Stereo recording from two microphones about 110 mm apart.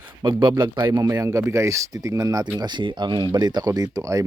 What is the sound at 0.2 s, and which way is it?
Speech, 40° right (ahead or behind).